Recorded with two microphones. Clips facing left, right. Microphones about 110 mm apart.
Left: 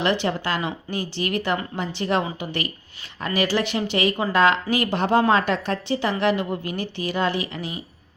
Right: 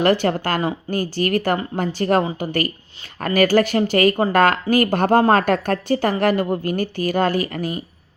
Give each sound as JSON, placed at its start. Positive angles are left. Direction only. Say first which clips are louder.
{"t": 0.0, "sound": "a woman's voice", "louder": "right 5 dB", "side_deg": -45}